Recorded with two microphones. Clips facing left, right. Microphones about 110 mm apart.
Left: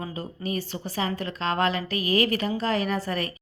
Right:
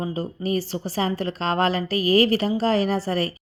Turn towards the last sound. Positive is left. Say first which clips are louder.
# right 4 dB
turn(degrees=-35)  # may be behind; listen again after turning